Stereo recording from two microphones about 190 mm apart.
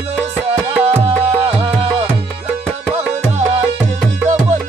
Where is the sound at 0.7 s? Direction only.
10° right (ahead or behind).